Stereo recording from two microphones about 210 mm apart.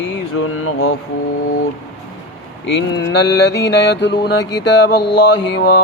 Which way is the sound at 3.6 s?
55° left (ahead or behind).